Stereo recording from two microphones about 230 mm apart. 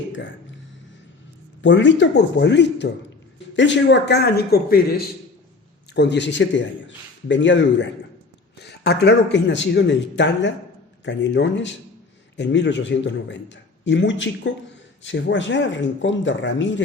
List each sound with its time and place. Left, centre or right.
1.6 s a man's voice: left